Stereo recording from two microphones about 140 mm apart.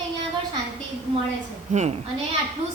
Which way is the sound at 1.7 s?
55° right (ahead or behind).